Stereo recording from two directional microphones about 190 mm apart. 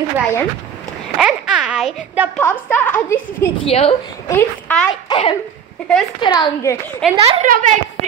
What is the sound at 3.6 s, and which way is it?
Speech, 30° left (ahead or behind).